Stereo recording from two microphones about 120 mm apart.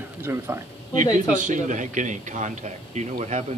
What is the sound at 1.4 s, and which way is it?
A man's voice, 90° right.